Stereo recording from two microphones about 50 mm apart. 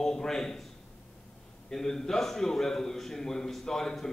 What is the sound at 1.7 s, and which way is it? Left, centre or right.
A man's voice, centre.